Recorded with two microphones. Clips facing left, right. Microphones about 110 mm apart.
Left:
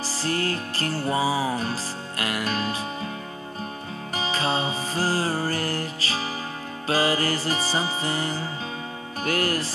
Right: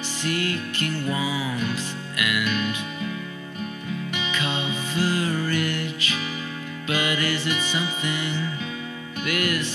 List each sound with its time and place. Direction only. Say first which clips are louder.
0.2 s music: even; 35° left (ahead or behind)
4.1 s music: left 5 dB; 35° left (ahead or behind)